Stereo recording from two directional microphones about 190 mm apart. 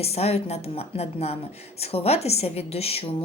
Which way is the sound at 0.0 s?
35° left (ahead or behind).